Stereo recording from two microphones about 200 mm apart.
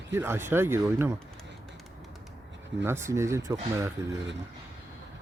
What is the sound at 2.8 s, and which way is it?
Speech, 15° right (ahead or behind).